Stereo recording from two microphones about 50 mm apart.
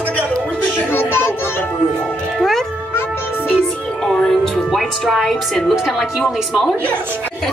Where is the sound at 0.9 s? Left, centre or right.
Left.